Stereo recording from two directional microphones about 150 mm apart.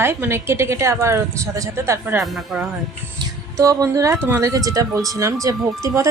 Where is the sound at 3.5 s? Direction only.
20° right (ahead or behind).